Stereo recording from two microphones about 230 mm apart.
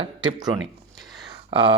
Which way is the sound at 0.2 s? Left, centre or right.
Right.